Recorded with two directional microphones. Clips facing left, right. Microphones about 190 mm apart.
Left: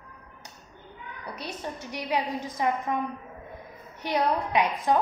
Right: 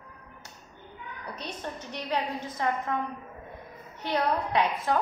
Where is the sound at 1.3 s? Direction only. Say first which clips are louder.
Left 2 dB; 10° left (ahead or behind).